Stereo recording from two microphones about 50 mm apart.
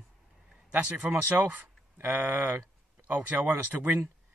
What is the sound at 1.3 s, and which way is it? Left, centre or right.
Speech, right.